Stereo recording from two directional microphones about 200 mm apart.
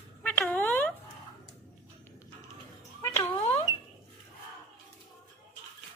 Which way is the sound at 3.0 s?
10° left (ahead or behind).